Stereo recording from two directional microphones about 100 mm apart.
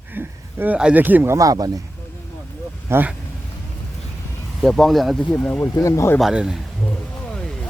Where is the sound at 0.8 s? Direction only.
15° right (ahead or behind).